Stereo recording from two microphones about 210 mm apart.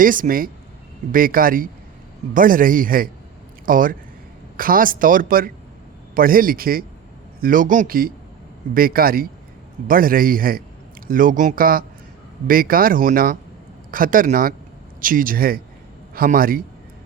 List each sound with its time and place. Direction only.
0.0 s speech: 40° right (ahead or behind)